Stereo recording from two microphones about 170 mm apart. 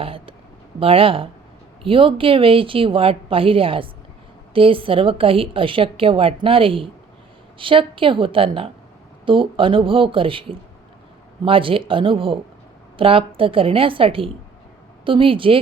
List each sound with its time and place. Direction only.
0.0 s a woman's voice: 30° right (ahead or behind)